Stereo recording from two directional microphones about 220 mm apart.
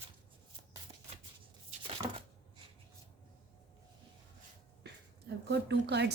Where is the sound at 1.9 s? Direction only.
25° right (ahead or behind).